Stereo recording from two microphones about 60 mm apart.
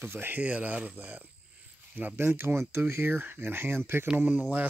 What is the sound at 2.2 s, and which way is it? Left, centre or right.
Speech, right.